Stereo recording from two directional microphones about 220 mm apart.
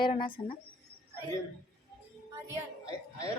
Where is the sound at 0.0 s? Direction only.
20° left (ahead or behind).